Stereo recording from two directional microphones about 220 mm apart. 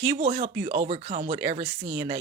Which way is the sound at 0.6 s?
30° right (ahead or behind).